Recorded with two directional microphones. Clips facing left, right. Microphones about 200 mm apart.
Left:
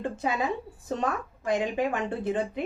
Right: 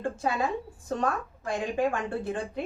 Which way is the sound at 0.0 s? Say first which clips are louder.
Even; 20° left (ahead or behind).